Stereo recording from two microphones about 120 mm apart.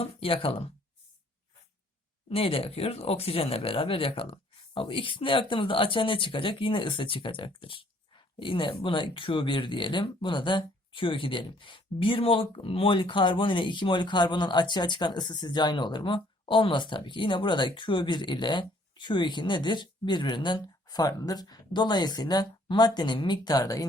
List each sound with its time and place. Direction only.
0.0 s speech: 50° left (ahead or behind)
2.3 s speech: 50° left (ahead or behind); by 23.8 s 30° left (ahead or behind)